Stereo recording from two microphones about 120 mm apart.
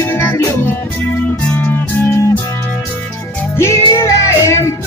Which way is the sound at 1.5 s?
15° left (ahead or behind).